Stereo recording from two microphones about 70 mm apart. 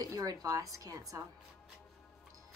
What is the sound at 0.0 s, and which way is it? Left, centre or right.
Speech, right.